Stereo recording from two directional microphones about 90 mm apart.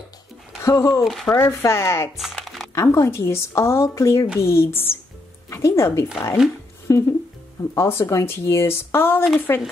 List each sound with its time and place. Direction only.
0.7 s speech: 30° left (ahead or behind)
1.0 s speech: centre (ahead or behind)
1.3 s speech: 30° left (ahead or behind)
2.1 s music: centre (ahead or behind)
2.7 s speech: 30° left (ahead or behind)